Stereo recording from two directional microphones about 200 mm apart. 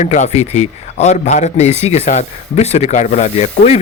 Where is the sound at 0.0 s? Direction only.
35° left (ahead or behind).